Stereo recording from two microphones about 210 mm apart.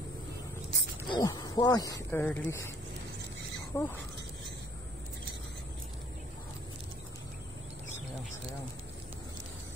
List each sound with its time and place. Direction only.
1.0 s speech: 20° left (ahead or behind)
3.7 s speech: 15° left (ahead or behind)